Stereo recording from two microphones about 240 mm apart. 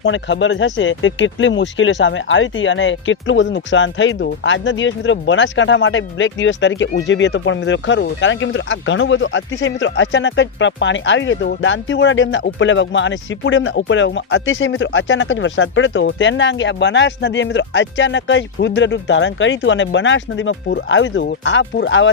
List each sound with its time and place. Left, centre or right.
0.0 s speech: left